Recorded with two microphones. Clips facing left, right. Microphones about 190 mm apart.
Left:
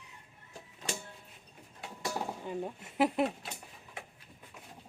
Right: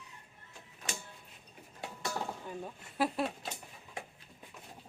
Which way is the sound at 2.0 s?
15° left (ahead or behind).